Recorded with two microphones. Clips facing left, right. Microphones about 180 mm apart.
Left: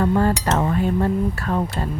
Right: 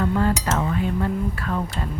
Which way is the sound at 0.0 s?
40° left (ahead or behind).